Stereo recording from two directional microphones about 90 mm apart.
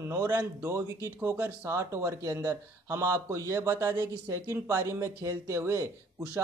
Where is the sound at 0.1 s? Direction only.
35° right (ahead or behind).